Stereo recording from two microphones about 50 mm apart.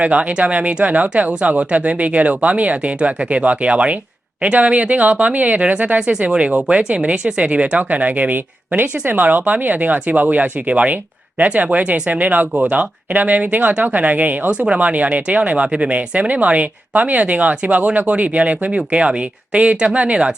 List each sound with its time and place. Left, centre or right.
0.0 s speech: right
6.3 s speech: centre